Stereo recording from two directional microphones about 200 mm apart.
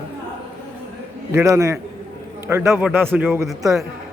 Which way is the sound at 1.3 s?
15° right (ahead or behind).